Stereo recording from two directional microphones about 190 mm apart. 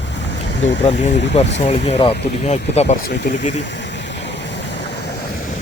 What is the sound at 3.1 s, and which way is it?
Speech, 65° left (ahead or behind).